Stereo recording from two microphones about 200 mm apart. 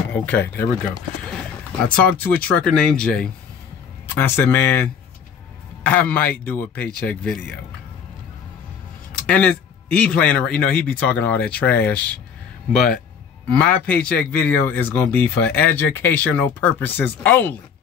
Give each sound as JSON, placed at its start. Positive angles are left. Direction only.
{"t": 0.1, "sound": "speech", "side_deg": 10}
{"t": 2.0, "sound": "speech", "side_deg": 5}
{"t": 5.9, "sound": "speech", "side_deg": 5}
{"t": 9.1, "sound": "speech", "side_deg": 5}